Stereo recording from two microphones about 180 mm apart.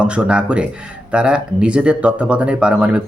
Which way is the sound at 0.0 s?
5° right (ahead or behind).